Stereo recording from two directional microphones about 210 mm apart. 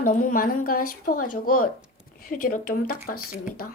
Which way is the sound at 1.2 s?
90° left.